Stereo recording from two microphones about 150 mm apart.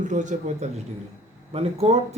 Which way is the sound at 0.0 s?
55° right (ahead or behind).